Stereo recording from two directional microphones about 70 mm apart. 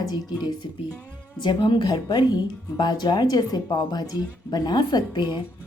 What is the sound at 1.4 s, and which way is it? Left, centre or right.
Speech, left.